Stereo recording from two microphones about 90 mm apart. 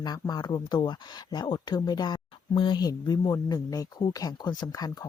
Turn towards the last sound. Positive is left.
turn(degrees=45)  # may be behind; listen again after turning